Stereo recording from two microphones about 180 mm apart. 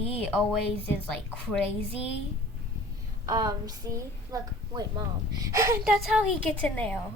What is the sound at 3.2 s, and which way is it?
Speech, 20° right (ahead or behind).